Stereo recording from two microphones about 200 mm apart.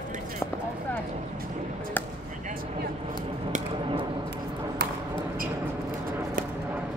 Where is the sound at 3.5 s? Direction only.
40° right (ahead or behind).